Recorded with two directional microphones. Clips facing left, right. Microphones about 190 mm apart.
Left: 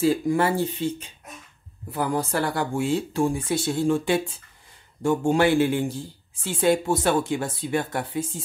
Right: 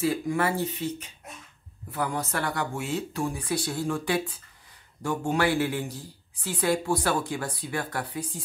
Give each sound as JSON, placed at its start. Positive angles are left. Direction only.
{"t": 0.0, "sound": "a man's voice", "side_deg": 30}